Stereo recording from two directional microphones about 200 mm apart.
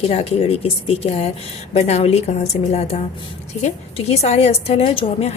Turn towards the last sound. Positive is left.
turn(degrees=30)  # may be behind; listen again after turning